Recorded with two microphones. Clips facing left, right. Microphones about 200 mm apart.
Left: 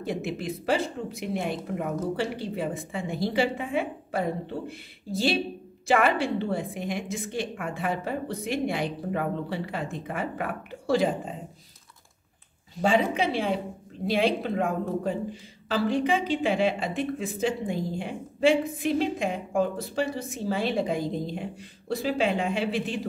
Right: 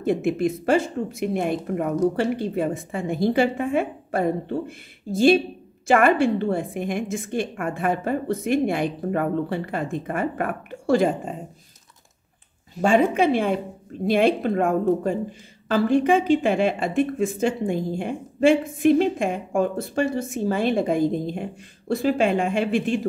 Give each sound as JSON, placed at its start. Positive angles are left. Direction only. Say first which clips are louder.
{"t": 0.0, "sound": "speech", "louder": "right 9 dB", "side_deg": -50}
{"t": 12.8, "sound": "speech", "louder": "right 5 dB", "side_deg": -50}